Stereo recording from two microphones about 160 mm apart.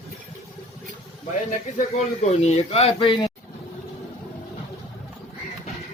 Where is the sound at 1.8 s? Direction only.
45° left (ahead or behind); by 3.3 s 30° left (ahead or behind).